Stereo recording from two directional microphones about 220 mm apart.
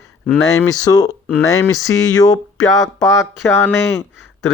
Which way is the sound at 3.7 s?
10° left (ahead or behind).